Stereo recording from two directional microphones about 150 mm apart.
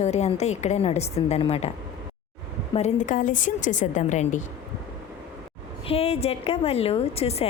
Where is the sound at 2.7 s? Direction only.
50° left (ahead or behind).